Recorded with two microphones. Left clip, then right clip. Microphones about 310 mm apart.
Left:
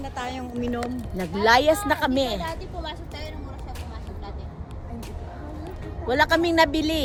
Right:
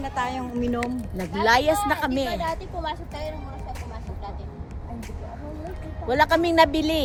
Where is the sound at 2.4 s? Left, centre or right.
Centre.